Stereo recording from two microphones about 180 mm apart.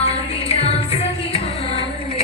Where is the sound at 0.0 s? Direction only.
35° left (ahead or behind).